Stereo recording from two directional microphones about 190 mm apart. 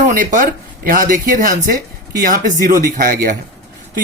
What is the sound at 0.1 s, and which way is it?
Speech, 45° right (ahead or behind).